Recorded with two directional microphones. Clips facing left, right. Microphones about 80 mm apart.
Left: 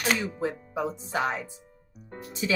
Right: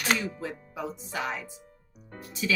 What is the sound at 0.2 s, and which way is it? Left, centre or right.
Speech, left.